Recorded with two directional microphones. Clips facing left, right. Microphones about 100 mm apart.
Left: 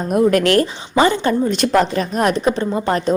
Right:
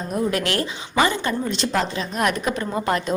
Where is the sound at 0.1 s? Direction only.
55° left (ahead or behind).